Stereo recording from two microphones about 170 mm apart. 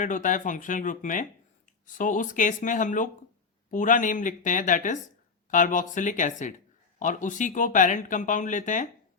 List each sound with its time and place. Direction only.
0.0 s speech: 50° left (ahead or behind)